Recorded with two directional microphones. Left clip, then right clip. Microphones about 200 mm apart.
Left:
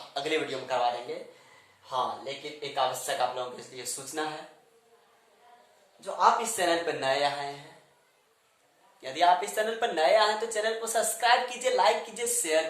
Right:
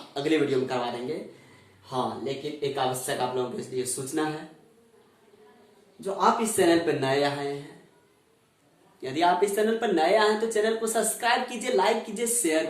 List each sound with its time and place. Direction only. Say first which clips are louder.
0.1 s a man's voice: right 5 dB; 20° left (ahead or behind)
1.9 s speech: right 1 dB; 20° left (ahead or behind)
6.1 s speech: right 1 dB; 20° left (ahead or behind)
9.0 s speech: right 1 dB; 15° left (ahead or behind)